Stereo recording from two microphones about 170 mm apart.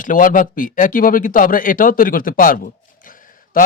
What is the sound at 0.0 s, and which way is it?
Speech, 50° left (ahead or behind).